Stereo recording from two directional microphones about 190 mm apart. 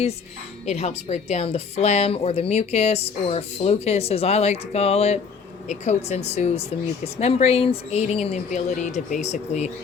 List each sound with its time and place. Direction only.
0.6 s a woman's voice: 35° left (ahead or behind)